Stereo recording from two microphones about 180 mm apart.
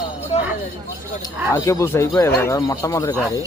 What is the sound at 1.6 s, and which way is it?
Speech, 15° left (ahead or behind).